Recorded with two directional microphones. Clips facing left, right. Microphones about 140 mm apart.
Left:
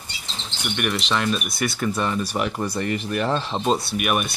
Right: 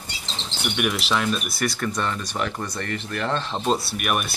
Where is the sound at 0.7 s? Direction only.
5° right (ahead or behind).